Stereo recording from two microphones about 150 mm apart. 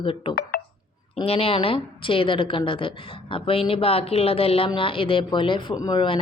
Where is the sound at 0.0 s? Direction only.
35° left (ahead or behind).